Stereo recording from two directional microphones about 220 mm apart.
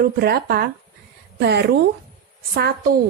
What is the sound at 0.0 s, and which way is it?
Speech, 45° right (ahead or behind).